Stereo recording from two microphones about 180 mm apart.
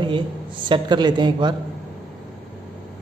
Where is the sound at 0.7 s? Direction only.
25° right (ahead or behind).